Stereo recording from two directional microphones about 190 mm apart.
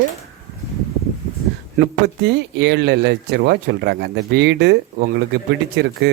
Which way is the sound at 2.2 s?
60° right (ahead or behind).